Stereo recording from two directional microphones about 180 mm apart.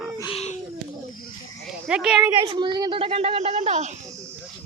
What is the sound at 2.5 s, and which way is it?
A woman's voice, 25° right (ahead or behind).